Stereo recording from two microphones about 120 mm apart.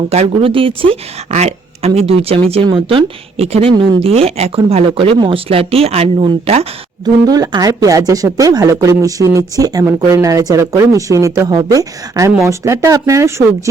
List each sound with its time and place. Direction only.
0.3 s a woman's voice: 50° right (ahead or behind)
1.3 s a woman's voice: 65° right (ahead or behind)
7.0 s speech: 35° right (ahead or behind)